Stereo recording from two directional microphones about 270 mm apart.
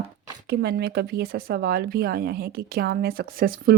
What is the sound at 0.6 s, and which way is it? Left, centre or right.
Speech, right.